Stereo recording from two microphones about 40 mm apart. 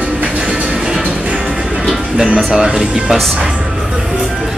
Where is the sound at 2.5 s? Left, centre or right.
Centre.